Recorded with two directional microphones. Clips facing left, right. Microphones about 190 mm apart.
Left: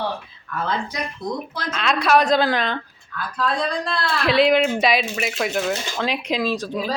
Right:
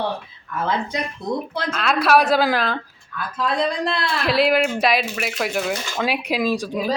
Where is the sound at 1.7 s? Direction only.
5° right (ahead or behind).